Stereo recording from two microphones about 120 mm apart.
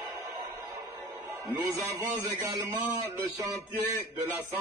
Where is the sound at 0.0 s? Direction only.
25° right (ahead or behind).